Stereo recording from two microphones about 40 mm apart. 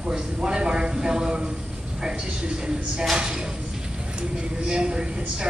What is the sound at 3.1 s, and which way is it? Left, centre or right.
Speech, centre.